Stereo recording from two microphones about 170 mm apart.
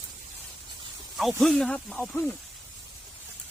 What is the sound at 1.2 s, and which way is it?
Speech, centre (ahead or behind).